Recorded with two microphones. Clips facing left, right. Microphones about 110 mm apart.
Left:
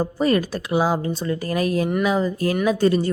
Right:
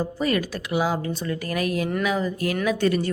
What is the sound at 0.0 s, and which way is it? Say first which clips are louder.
Speech: left 4 dB; 35° left (ahead or behind).